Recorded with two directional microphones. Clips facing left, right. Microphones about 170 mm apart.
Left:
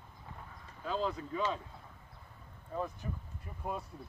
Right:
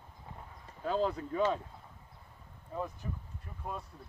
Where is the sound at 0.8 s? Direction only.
50° right (ahead or behind).